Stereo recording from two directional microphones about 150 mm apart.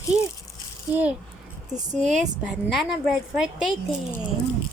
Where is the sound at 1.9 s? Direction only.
55° right (ahead or behind).